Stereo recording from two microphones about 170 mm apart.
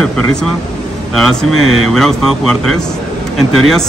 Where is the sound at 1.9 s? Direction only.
Centre (ahead or behind).